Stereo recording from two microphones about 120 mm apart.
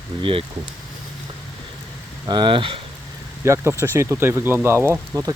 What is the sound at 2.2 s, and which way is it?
Speech, 40° right (ahead or behind).